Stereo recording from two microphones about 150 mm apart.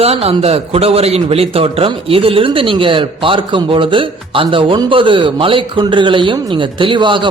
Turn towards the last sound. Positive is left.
turn(degrees=-35)  # may be behind; listen again after turning